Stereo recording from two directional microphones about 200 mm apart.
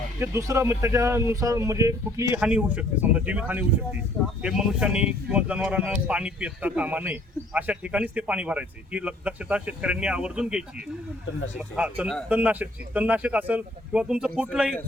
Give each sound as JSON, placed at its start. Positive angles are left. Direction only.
{"t": 0.2, "sound": "a man's voice", "side_deg": -15}